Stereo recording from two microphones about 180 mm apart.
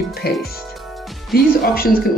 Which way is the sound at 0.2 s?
60° left (ahead or behind).